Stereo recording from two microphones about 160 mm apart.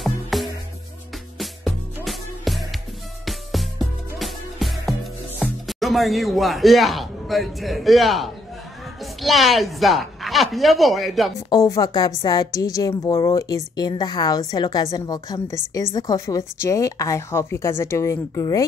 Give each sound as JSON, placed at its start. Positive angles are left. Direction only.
{"t": 0.0, "sound": "music", "side_deg": 0}
{"t": 4.2, "sound": "music", "side_deg": 0}
{"t": 5.4, "sound": "a woman's voice", "side_deg": 0}
{"t": 11.3, "sound": "a woman's voice", "side_deg": 20}